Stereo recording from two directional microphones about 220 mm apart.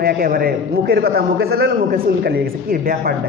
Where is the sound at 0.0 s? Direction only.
45° right (ahead or behind).